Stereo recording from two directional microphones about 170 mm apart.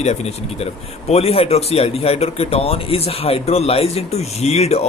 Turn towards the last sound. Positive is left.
turn(degrees=40)  # may be behind; listen again after turning